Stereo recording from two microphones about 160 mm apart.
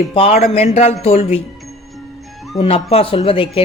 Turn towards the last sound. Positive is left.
turn(degrees=35)  # may be behind; listen again after turning